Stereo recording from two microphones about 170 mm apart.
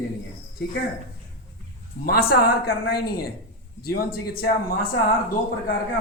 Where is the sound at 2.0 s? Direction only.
65° left (ahead or behind).